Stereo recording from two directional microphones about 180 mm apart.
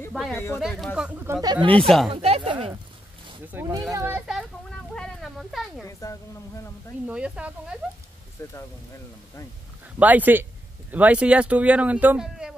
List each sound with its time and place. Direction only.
0.3 s a woman's voice: 15° left (ahead or behind)
0.6 s speech: centre (ahead or behind)
1.7 s speech: 5° left (ahead or behind)
2.0 s speech: 30° right (ahead or behind)
3.5 s speech: 15° right (ahead or behind)
4.3 s a sound: centre (ahead or behind)
5.9 s a woman's voice: 15° left (ahead or behind)
7.1 s speech: 5° right (ahead or behind)
8.4 s a woman's voice: 15° left (ahead or behind)
9.9 s speech: 10° right (ahead or behind)